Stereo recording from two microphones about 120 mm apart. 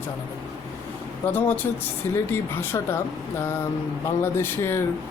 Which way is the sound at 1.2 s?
15° left (ahead or behind).